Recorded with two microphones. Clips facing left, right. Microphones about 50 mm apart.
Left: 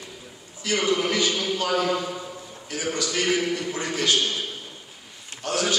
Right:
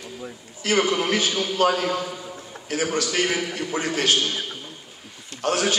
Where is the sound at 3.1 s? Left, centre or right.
Right.